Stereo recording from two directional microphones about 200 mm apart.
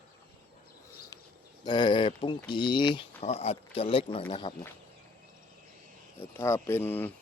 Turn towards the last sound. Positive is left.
turn(degrees=10)  # may be behind; listen again after turning